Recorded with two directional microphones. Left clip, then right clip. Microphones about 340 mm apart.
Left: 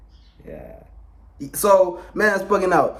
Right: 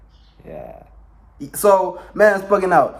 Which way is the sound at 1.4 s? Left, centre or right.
Centre.